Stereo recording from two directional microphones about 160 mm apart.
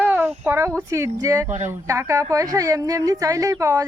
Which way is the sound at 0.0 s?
10° right (ahead or behind).